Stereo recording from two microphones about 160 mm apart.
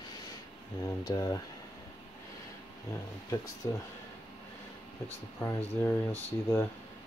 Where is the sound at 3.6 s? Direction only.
20° left (ahead or behind).